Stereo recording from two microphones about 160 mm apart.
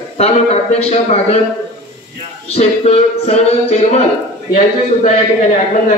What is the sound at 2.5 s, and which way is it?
A man's voice, 40° left (ahead or behind).